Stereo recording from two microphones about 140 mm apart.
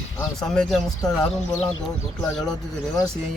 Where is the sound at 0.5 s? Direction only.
5° left (ahead or behind).